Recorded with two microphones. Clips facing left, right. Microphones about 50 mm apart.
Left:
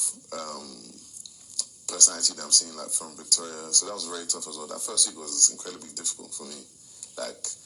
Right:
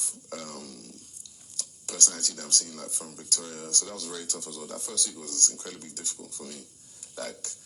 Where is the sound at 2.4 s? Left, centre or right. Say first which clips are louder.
Left 2 dB; right.